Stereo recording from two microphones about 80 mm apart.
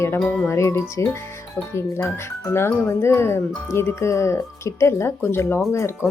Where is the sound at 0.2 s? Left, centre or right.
Centre.